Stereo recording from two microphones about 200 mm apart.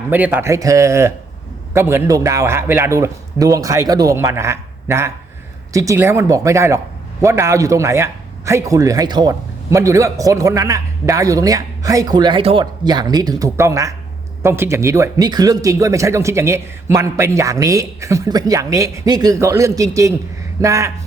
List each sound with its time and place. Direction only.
0.1 s a man's voice: 10° right (ahead or behind)